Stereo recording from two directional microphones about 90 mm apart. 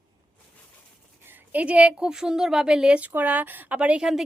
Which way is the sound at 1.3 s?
15° right (ahead or behind).